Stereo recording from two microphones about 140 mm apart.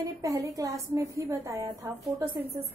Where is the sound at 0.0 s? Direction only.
25° right (ahead or behind).